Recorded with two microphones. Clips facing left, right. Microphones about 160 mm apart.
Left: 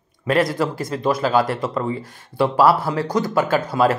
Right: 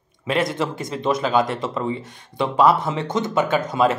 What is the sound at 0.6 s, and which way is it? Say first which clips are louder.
Speech: left 2 dB; 20° right (ahead or behind).